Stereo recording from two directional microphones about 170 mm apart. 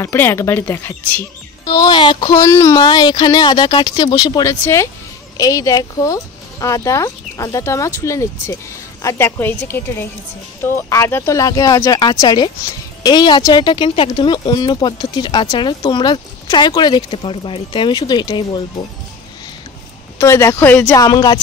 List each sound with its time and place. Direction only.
0.0 s speech: 15° left (ahead or behind)
20.2 s speech: 15° left (ahead or behind)
21.0 s speech: 20° left (ahead or behind)